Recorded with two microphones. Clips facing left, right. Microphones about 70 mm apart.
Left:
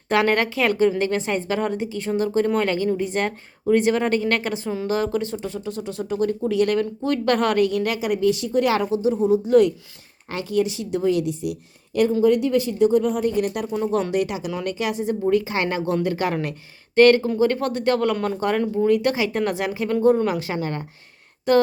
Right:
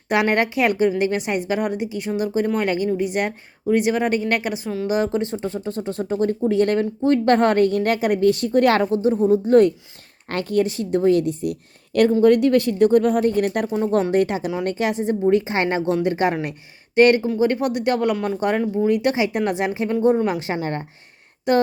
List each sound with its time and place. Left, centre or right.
0.1 s a woman's voice: centre; by 11.5 s right
12.2 s speech: right
21.5 s speech: right